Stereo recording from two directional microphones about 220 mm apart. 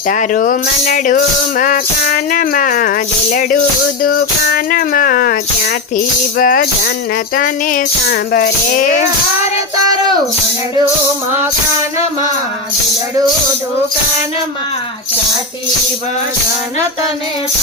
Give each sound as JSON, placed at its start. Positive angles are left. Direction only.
{"t": 0.1, "sound": "music", "side_deg": 35}